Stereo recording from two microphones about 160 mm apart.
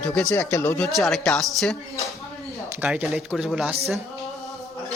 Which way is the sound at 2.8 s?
10° right (ahead or behind).